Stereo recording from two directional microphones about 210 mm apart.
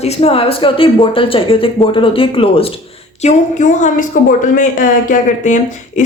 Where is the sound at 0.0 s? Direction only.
30° left (ahead or behind).